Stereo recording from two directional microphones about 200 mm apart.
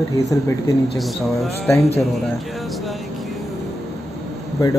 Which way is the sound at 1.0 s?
Centre (ahead or behind).